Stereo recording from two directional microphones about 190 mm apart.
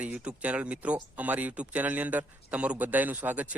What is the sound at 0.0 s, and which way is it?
Speech, 5° right (ahead or behind).